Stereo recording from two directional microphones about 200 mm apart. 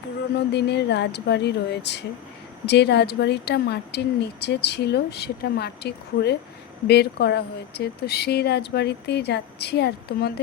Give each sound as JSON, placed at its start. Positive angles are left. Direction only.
{"t": 0.3, "sound": "a woman's voice", "side_deg": 55}